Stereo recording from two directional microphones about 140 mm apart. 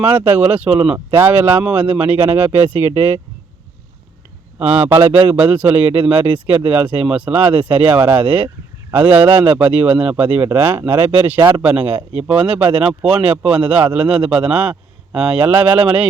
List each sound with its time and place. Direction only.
0.3 s a man's voice: 10° right (ahead or behind)
4.6 s a man's voice: 10° right (ahead or behind)
11.3 s speech: 25° right (ahead or behind)
11.6 s a man's voice: 10° right (ahead or behind)